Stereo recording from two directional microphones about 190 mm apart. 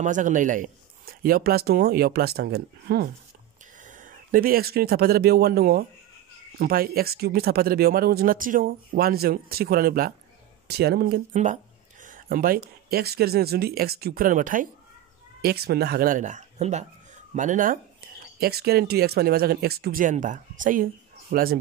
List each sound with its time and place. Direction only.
0.0 s speech: 40° right (ahead or behind)
3.8 s a man's voice: 45° right (ahead or behind)
11.3 s speech: 40° right (ahead or behind)
15.4 s speech: 55° right (ahead or behind)
18.4 s speech: 55° right (ahead or behind)